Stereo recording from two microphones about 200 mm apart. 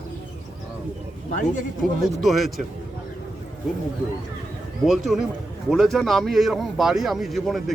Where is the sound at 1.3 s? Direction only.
40° left (ahead or behind).